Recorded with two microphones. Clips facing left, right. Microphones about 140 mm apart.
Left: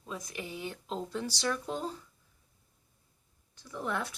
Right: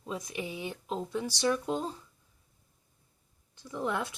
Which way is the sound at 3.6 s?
20° right (ahead or behind).